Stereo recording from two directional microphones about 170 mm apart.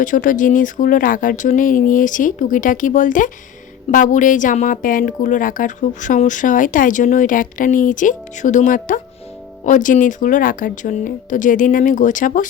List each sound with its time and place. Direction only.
0.0 s speech: 50° left (ahead or behind)